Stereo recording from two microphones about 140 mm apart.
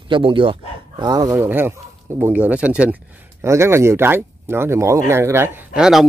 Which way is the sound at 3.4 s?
20° right (ahead or behind).